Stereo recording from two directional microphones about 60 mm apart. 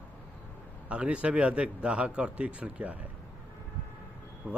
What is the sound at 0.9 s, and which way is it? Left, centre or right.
A man's voice, centre.